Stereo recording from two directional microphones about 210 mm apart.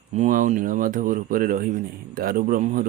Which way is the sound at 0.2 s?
35° right (ahead or behind).